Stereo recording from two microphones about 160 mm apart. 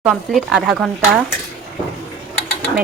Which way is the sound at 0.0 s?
Centre (ahead or behind).